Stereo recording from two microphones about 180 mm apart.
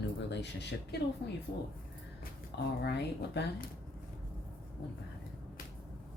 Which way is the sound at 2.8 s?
65° left (ahead or behind).